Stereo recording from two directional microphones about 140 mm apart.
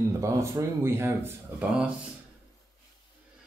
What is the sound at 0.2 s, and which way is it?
Speech, 25° right (ahead or behind).